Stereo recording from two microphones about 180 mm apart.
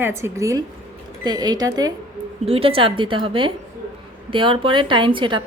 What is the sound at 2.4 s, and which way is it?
A woman's voice, 30° right (ahead or behind).